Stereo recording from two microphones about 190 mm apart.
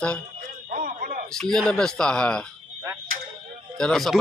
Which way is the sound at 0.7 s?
45° right (ahead or behind).